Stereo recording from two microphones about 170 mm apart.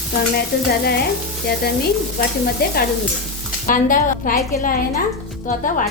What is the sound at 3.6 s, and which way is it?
Speech, 50° left (ahead or behind).